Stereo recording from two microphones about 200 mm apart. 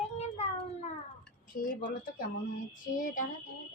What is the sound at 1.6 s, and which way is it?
Speech, 45° left (ahead or behind).